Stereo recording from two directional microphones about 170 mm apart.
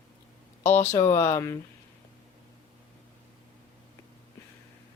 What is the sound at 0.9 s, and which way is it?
Speech, 15° left (ahead or behind).